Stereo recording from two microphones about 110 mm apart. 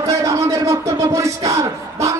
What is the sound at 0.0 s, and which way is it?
Music, 30° right (ahead or behind).